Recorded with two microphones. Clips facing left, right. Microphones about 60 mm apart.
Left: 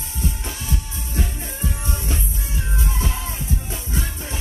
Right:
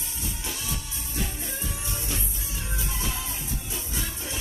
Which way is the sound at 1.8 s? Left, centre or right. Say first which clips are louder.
Left 5 dB; left.